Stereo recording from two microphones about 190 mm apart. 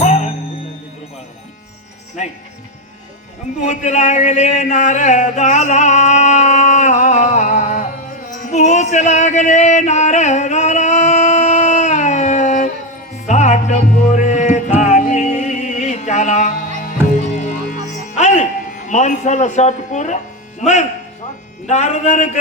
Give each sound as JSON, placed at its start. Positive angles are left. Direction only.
{"t": 0.0, "sound": "music", "side_deg": 35}
{"t": 3.7, "sound": "speech", "side_deg": 40}
{"t": 8.3, "sound": "music", "side_deg": 40}
{"t": 21.7, "sound": "speech", "side_deg": 35}